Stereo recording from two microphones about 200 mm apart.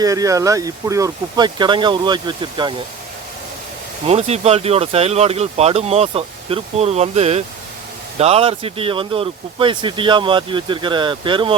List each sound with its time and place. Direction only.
0.0 s speech: 15° right (ahead or behind)
4.0 s speech: 30° right (ahead or behind)